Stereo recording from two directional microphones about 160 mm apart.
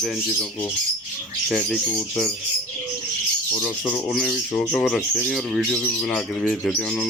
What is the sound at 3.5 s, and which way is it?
Speech, 10° left (ahead or behind).